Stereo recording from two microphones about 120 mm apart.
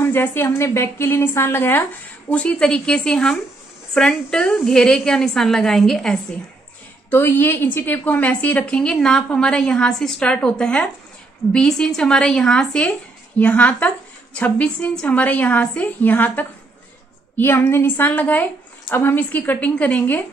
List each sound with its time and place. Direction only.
0.0 s a woman's voice: 20° left (ahead or behind)
7.1 s a woman's voice: 20° left (ahead or behind)